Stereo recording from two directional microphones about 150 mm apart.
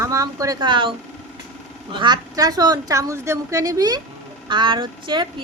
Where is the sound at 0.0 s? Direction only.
20° right (ahead or behind).